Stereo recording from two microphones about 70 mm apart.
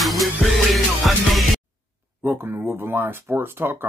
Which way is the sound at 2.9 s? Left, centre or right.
Right.